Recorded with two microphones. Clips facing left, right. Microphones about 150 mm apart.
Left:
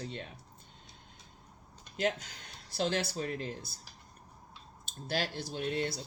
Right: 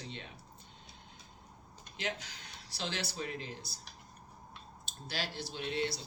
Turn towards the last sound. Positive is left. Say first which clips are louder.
# left 2 dB
turn(degrees=50)  # may be behind; listen again after turning